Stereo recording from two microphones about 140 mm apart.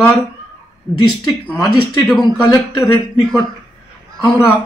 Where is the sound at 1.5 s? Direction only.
30° left (ahead or behind).